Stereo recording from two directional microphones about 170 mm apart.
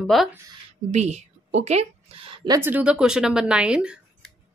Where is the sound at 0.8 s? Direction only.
40° right (ahead or behind).